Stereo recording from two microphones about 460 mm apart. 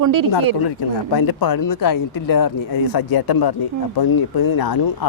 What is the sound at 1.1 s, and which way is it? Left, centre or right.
Speech, left.